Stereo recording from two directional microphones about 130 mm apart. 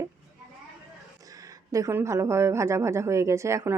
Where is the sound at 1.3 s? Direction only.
25° right (ahead or behind).